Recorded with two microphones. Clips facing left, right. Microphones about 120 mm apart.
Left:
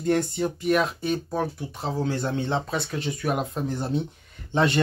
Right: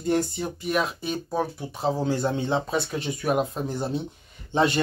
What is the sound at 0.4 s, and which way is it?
Speech, 10° right (ahead or behind).